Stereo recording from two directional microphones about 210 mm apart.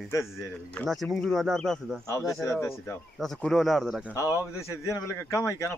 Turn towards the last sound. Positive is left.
turn(degrees=15)  # may be behind; listen again after turning